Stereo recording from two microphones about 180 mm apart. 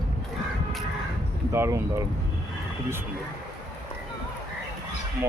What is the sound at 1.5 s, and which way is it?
Speech, 15° right (ahead or behind).